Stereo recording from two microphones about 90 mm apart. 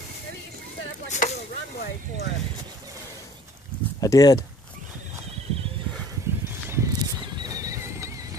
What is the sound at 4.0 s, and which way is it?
Speech, 45° left (ahead or behind).